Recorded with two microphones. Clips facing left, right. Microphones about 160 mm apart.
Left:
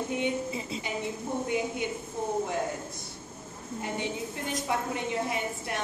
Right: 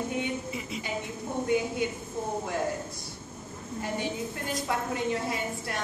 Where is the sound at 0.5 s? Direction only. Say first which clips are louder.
Left 1 dB; 30° left (ahead or behind).